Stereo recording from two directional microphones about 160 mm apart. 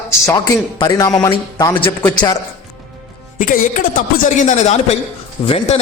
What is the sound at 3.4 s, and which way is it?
A man's voice, 55° left (ahead or behind).